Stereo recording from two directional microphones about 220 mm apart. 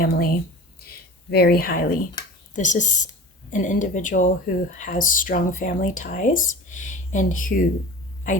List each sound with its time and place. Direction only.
0.0 s speech: 40° left (ahead or behind)
2.2 s a sound: 20° left (ahead or behind)
2.5 s speech: 35° left (ahead or behind)